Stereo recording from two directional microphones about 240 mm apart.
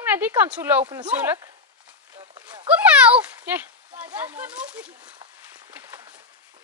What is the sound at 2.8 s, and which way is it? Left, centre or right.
Speech, centre.